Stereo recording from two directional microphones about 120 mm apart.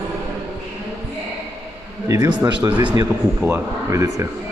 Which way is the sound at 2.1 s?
35° right (ahead or behind).